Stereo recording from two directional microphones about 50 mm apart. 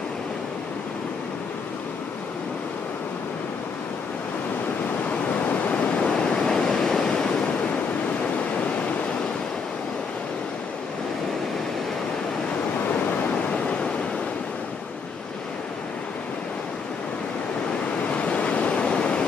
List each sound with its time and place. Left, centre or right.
5.5 s waves: left
13.5 s a sound: left
18.1 s waves: left